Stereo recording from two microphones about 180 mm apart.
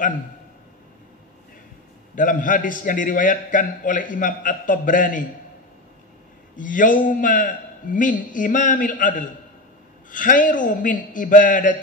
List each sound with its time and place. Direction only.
2.1 s a man's voice: 45° left (ahead or behind)
6.5 s a man's voice: 45° left (ahead or behind)